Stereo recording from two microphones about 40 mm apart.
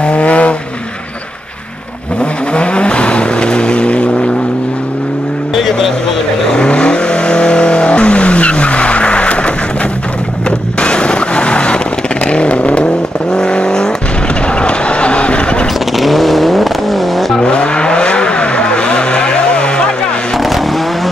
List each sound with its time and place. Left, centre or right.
0.0 s vehicle: left
2.5 s vehicle: left
6.5 s vehicle: left
10.8 s a sound: left
12.3 s vehicle: left
14.6 s a sound: left
16.0 s vehicle: centre
17.4 s vehicle: left